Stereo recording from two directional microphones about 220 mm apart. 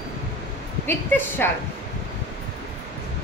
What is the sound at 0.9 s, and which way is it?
Speech, 10° left (ahead or behind).